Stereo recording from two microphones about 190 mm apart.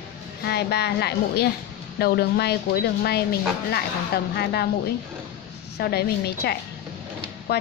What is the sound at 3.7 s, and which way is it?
A woman's voice, 55° left (ahead or behind).